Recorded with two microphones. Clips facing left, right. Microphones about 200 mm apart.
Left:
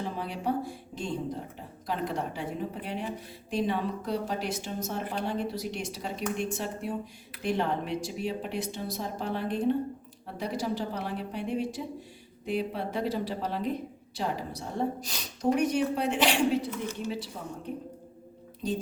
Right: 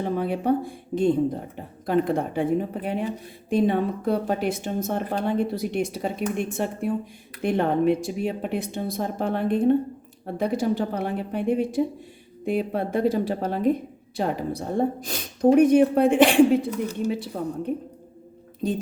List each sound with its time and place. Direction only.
0.0 s a woman's voice: 55° right (ahead or behind)
18.6 s speech: 55° right (ahead or behind)